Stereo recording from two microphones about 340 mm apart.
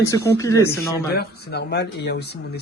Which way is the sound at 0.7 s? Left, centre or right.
Left.